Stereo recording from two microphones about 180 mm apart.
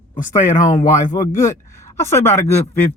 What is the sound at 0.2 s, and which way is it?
Speech, 45° left (ahead or behind).